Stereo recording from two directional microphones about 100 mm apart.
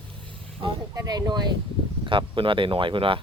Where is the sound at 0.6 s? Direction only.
60° right (ahead or behind).